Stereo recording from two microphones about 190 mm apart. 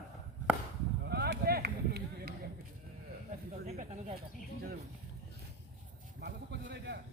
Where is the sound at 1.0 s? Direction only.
60° right (ahead or behind).